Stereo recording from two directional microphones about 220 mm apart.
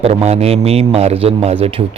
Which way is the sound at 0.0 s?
30° right (ahead or behind).